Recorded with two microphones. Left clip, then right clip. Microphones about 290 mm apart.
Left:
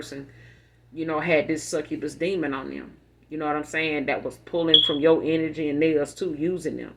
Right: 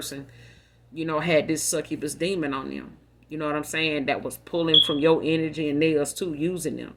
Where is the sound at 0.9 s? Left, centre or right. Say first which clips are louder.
Even; right.